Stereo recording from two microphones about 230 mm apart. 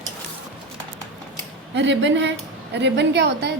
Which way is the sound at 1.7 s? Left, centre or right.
Right.